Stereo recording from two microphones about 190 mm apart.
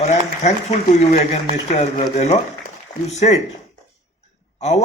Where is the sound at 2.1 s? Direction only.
35° left (ahead or behind).